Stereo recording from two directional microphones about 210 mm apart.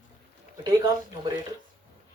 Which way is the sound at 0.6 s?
20° right (ahead or behind).